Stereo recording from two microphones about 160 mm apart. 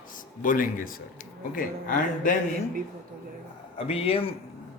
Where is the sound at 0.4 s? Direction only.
60° left (ahead or behind).